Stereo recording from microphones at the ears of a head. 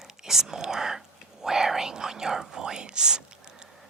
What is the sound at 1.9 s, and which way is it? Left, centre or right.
Speech, right.